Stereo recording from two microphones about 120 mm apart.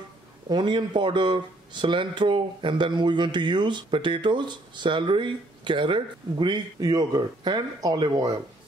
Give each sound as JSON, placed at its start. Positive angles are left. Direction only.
{"t": 0.5, "sound": "speech", "side_deg": -40}